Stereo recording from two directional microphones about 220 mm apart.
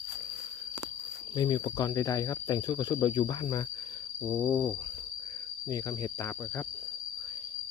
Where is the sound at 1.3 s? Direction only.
20° left (ahead or behind).